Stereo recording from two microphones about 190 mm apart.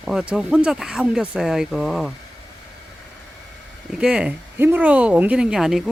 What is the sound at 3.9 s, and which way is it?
Speech, 5° right (ahead or behind).